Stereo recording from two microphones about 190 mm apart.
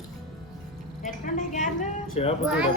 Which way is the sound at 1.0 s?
40° left (ahead or behind).